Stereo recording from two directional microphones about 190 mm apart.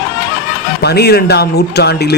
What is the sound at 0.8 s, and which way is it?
A man's voice, 55° left (ahead or behind).